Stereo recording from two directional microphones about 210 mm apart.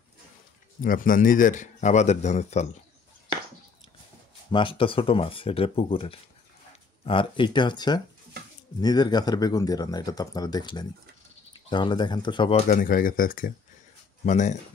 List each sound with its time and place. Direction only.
0.7 s speech: 40° left (ahead or behind)
4.5 s speech: 25° left (ahead or behind)